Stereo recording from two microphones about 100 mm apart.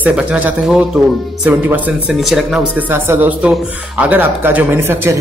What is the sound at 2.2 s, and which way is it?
Speech, 5° right (ahead or behind).